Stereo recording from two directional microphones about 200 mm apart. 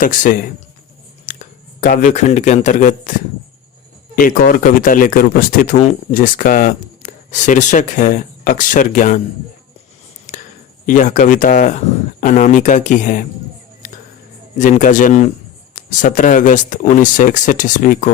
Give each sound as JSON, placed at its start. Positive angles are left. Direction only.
{"t": 0.0, "sound": "speech", "side_deg": 40}
{"t": 10.3, "sound": "a sound", "side_deg": 35}
{"t": 10.8, "sound": "speech", "side_deg": 40}
{"t": 14.6, "sound": "speech", "side_deg": 40}